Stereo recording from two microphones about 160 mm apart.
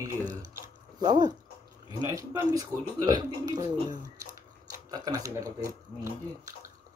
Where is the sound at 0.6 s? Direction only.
25° right (ahead or behind).